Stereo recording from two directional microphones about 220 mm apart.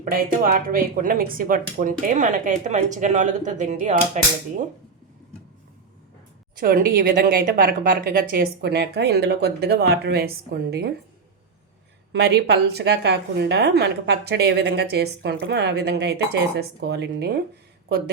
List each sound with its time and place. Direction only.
0.0 s speech: 40° right (ahead or behind)
6.6 s a woman's voice: 40° right (ahead or behind)
12.1 s a woman's voice: 50° right (ahead or behind)